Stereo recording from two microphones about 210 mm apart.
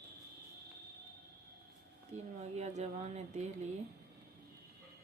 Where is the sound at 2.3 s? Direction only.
30° right (ahead or behind).